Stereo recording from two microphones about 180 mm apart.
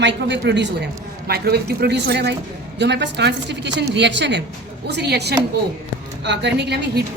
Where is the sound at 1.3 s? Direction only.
60° right (ahead or behind).